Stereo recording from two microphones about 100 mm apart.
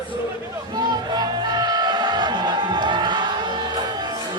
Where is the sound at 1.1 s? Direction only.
45° right (ahead or behind).